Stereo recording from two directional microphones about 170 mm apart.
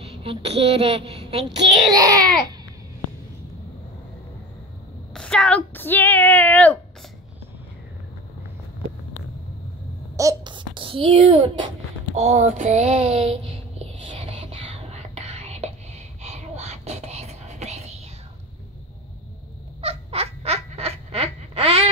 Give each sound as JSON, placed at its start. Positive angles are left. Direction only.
{"t": 0.0, "sound": "a woman's voice", "side_deg": -35}
{"t": 1.9, "sound": "speech", "side_deg": -20}
{"t": 5.1, "sound": "speech", "side_deg": 5}
{"t": 10.1, "sound": "a child's voice", "side_deg": -25}
{"t": 12.2, "sound": "child singing", "side_deg": -40}
{"t": 19.8, "sound": "a sound", "side_deg": -35}